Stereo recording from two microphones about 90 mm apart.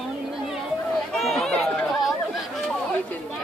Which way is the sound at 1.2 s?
Centre (ahead or behind).